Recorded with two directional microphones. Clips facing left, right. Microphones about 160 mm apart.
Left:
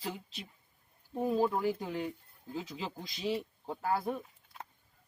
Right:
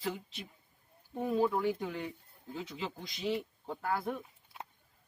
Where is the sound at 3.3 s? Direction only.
35° left (ahead or behind).